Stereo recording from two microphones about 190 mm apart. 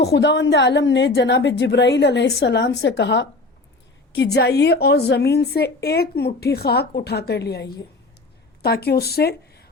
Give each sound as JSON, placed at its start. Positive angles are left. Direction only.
{"t": 0.0, "sound": "a woman's voice", "side_deg": 60}